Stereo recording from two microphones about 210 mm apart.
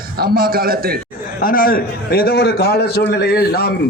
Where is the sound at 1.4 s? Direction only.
40° left (ahead or behind).